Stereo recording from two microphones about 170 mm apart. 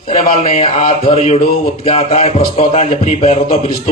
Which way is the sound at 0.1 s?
40° left (ahead or behind).